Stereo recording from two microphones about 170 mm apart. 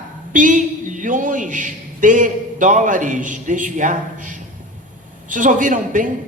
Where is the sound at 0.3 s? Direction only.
50° right (ahead or behind).